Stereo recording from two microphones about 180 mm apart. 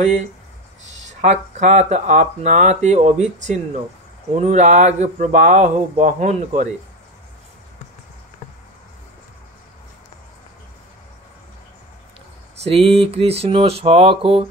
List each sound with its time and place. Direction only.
1.2 s speech: 40° right (ahead or behind)
12.6 s speech: 35° right (ahead or behind)